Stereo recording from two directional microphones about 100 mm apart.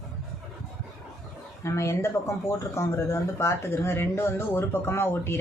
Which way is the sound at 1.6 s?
30° left (ahead or behind).